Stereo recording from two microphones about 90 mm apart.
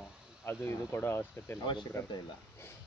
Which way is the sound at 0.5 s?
25° left (ahead or behind).